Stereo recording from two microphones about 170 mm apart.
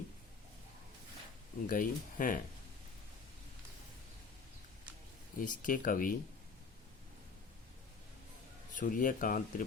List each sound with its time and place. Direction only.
1.6 s speech: 55° left (ahead or behind)
5.4 s speech: 50° left (ahead or behind)
8.7 s speech: 50° left (ahead or behind)